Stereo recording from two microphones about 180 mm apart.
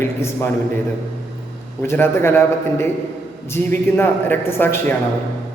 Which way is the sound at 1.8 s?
10° left (ahead or behind).